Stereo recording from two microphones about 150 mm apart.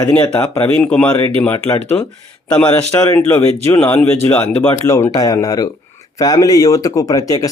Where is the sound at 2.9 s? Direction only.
20° left (ahead or behind).